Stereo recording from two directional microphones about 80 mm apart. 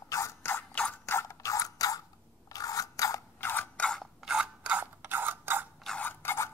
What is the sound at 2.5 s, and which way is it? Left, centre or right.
Scrape, left.